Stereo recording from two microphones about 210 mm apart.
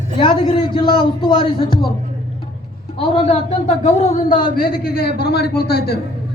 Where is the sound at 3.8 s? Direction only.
30° left (ahead or behind).